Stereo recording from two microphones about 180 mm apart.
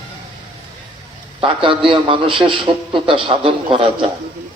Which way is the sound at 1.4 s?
30° right (ahead or behind).